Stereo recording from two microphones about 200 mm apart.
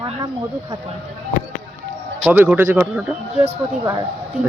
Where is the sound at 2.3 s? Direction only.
10° right (ahead or behind).